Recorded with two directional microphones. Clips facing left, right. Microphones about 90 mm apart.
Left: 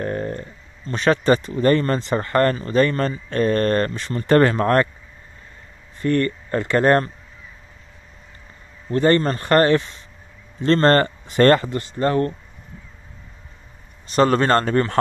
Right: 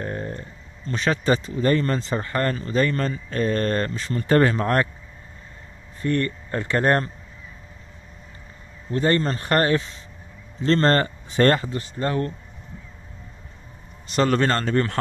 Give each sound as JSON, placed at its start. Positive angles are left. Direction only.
{"t": 0.0, "sound": "a sound", "side_deg": 75}
{"t": 0.9, "sound": "speech", "side_deg": 50}
{"t": 2.0, "sound": "speech", "side_deg": 65}
{"t": 2.6, "sound": "speech", "side_deg": 45}
{"t": 6.0, "sound": "speech", "side_deg": 90}
{"t": 8.9, "sound": "speech", "side_deg": 65}
{"t": 9.4, "sound": "speech", "side_deg": 75}
{"t": 10.6, "sound": "speech", "side_deg": 45}
{"t": 11.3, "sound": "speech", "side_deg": 85}
{"t": 14.1, "sound": "speech", "side_deg": 40}